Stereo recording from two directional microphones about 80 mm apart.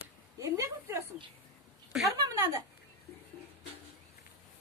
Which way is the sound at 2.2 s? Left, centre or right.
Right.